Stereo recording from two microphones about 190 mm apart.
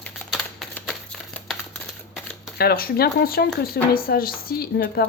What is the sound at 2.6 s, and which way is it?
Speech, 55° left (ahead or behind).